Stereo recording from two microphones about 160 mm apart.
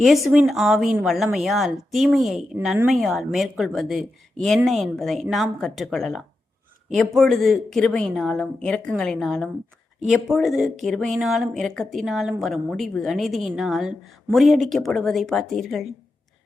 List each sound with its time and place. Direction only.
0.3 s a woman's voice: 5° right (ahead or behind)